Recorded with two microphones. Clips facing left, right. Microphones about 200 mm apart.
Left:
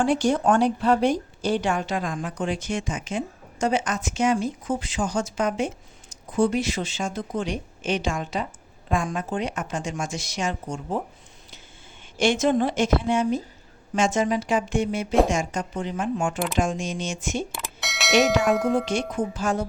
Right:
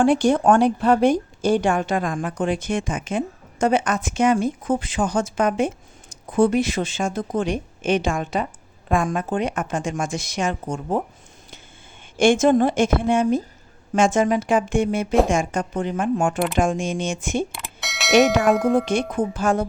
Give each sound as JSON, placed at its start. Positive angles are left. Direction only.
{"t": 0.0, "sound": "a woman's voice", "side_deg": -55}
{"t": 12.1, "sound": "a woman's voice", "side_deg": -50}
{"t": 17.5, "sound": "a sound", "side_deg": 0}
{"t": 18.9, "sound": "a woman's voice", "side_deg": -55}